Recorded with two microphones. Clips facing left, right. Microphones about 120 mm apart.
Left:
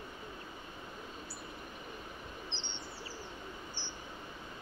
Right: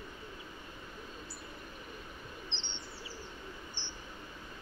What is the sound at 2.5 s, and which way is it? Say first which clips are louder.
Bird: left 1 dB; 20° right (ahead or behind).